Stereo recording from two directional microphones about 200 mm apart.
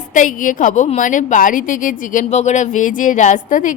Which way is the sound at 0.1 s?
40° left (ahead or behind).